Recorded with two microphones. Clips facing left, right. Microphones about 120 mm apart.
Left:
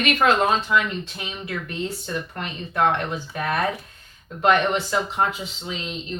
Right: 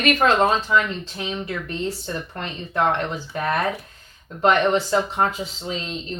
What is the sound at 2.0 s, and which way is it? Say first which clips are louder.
Speech: even; 30° right (ahead or behind).